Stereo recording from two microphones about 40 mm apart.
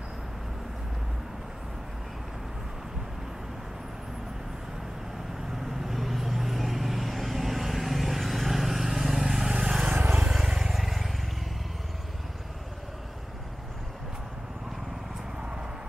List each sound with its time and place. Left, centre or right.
5.7 s vehicle: centre